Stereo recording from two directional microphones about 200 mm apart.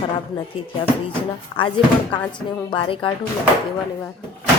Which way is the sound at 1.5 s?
25° left (ahead or behind).